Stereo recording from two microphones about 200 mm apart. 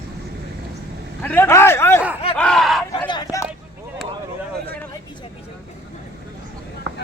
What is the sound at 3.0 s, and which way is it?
Vehicle, 20° left (ahead or behind).